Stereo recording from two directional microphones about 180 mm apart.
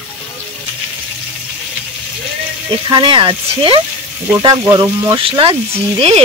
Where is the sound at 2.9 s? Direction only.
25° right (ahead or behind).